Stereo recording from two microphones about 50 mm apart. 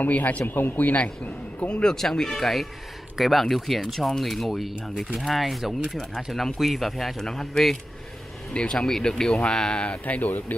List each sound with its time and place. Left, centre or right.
0.0 s a man's voice: left
0.5 s a man's voice: left
1.8 s speech: centre
10.0 s a man's voice: left